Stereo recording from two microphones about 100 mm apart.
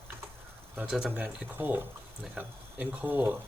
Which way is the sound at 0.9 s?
5° right (ahead or behind).